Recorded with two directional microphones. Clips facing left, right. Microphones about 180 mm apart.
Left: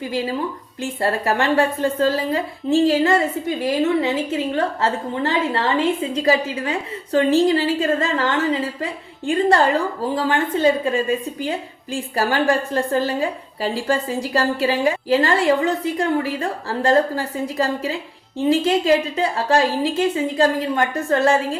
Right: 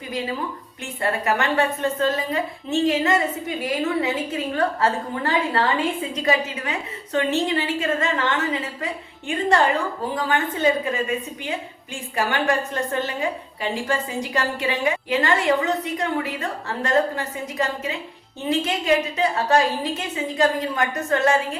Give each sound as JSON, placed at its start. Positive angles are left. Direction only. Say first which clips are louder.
{"t": 0.8, "sound": "a woman's voice", "louder": "left 4 dB", "side_deg": 30}